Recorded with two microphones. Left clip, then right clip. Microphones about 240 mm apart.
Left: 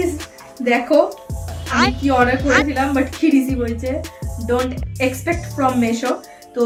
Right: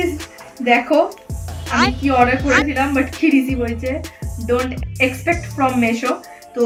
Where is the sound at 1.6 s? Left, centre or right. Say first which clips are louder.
Even; centre.